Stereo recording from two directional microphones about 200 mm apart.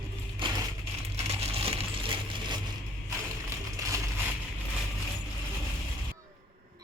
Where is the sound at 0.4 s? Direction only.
25° right (ahead or behind).